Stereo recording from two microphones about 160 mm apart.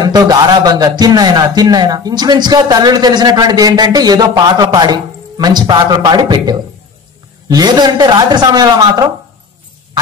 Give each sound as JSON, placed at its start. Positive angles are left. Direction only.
{"t": 0.0, "sound": "a man's voice", "side_deg": -25}